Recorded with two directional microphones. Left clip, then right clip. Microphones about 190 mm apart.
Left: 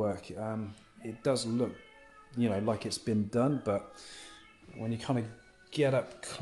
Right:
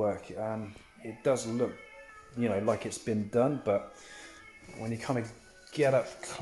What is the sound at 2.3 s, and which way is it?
Speech, 20° left (ahead or behind).